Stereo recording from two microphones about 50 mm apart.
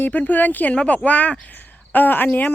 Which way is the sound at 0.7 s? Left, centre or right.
Left.